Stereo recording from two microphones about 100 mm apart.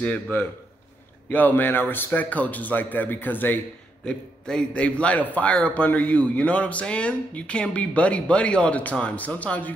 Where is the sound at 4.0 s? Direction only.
10° left (ahead or behind).